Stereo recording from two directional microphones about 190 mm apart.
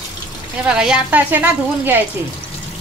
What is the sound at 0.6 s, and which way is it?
A woman's voice, 5° right (ahead or behind).